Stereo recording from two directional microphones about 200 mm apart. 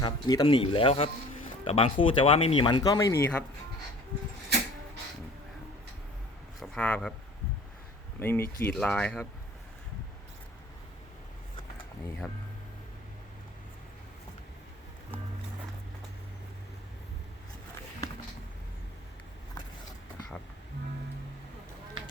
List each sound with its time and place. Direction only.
0.0 s speech: 20° left (ahead or behind)
6.6 s a sound: 5° left (ahead or behind)
8.2 s speech: 10° left (ahead or behind)
12.2 s speech: centre (ahead or behind)
22.0 s fire: 25° right (ahead or behind)